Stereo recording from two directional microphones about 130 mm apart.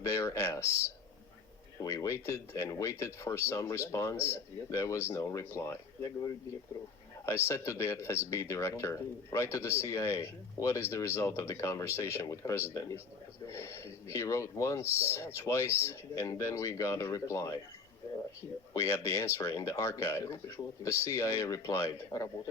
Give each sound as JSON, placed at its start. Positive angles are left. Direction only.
{"t": 0.0, "sound": "speech", "side_deg": 25}
{"t": 1.8, "sound": "speech", "side_deg": 25}
{"t": 18.7, "sound": "speech", "side_deg": 20}